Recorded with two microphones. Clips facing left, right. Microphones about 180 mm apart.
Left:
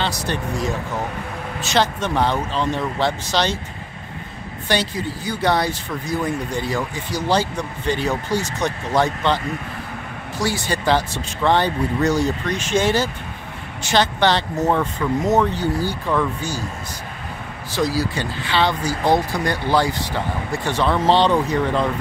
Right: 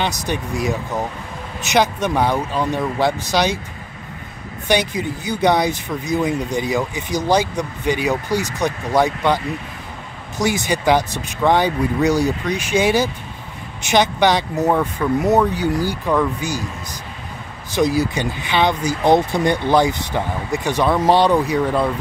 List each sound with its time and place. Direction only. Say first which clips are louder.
0.0 s speech: right 1 dB; 15° right (ahead or behind)
4.6 s speech: right 3 dB; 15° right (ahead or behind)
17.7 s speech: right 4 dB; 20° right (ahead or behind)